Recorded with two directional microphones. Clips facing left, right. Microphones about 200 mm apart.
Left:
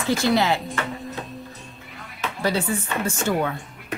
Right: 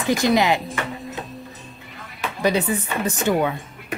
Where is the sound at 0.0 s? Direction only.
15° right (ahead or behind).